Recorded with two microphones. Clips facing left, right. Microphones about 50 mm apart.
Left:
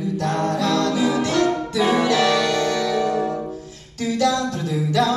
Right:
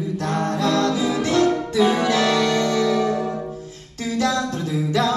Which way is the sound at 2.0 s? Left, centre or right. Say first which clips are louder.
Left 1 dB; right.